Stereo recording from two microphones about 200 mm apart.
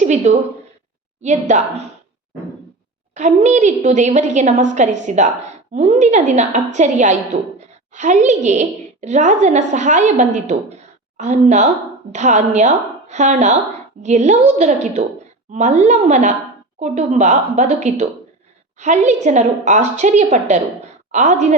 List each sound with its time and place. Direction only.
0.0 s a woman's voice: 35° right (ahead or behind)
3.2 s a woman's voice: 35° right (ahead or behind)